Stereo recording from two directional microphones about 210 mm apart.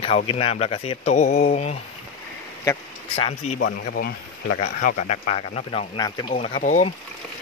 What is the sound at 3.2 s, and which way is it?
Speech, 30° left (ahead or behind).